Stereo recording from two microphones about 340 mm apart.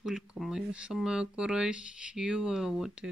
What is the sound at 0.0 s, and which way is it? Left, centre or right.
Speech, centre.